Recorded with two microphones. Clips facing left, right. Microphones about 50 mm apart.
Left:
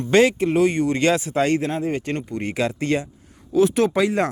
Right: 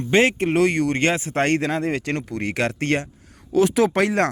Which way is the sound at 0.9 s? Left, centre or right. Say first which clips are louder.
Left 2 dB; right.